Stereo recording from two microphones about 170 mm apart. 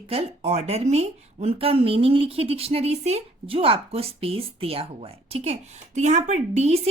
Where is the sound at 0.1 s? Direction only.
35° right (ahead or behind).